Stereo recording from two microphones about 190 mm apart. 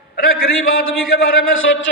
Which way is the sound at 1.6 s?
90° left.